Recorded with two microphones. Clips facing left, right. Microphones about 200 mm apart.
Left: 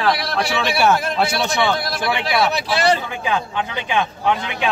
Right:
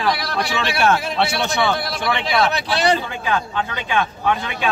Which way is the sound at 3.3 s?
20° left (ahead or behind).